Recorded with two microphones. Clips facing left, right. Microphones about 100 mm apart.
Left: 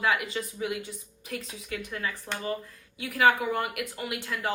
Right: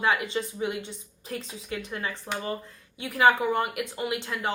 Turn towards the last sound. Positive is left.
turn(degrees=-25)  # may be behind; listen again after turning